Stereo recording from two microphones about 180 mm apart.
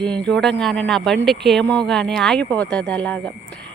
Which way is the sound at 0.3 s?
5° left (ahead or behind).